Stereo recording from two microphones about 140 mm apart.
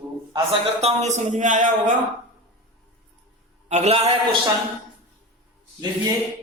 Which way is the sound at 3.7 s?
50° right (ahead or behind).